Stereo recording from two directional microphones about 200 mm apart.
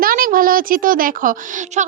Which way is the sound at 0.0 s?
45° right (ahead or behind).